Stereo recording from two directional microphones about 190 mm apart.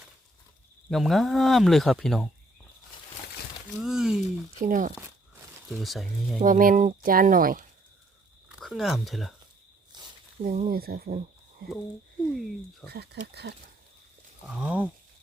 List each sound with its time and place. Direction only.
0.9 s speech: centre (ahead or behind)
3.8 s speech: 5° right (ahead or behind)
4.6 s speech: 45° right (ahead or behind)
5.6 s speech: centre (ahead or behind)
6.4 s speech: 45° right (ahead or behind)
8.4 s speech: 5° right (ahead or behind)
9.9 s snake: 25° right (ahead or behind)
10.4 s speech: 40° right (ahead or behind)
10.8 s speech: 55° right (ahead or behind)
12.3 s speech: centre (ahead or behind)
12.9 s speech: 60° right (ahead or behind)
14.4 s speech: 5° right (ahead or behind)